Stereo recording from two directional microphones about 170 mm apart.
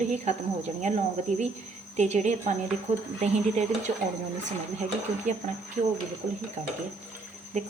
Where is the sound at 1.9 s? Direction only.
40° right (ahead or behind).